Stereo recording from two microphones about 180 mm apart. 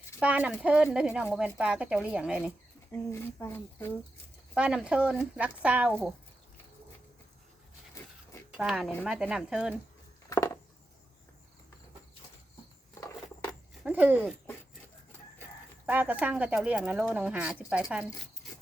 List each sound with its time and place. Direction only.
0.2 s a woman's voice: 5° right (ahead or behind)
3.1 s speech: 15° left (ahead or behind)
4.5 s speech: 5° right (ahead or behind)
8.5 s a woman's voice: 5° right (ahead or behind)
10.2 s a sound: 15° left (ahead or behind)
12.9 s a sound: 15° left (ahead or behind)
13.8 s speech: 10° right (ahead or behind)
15.9 s speech: 10° right (ahead or behind)